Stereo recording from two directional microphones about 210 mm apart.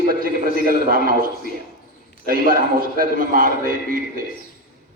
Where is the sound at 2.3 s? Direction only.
45° right (ahead or behind).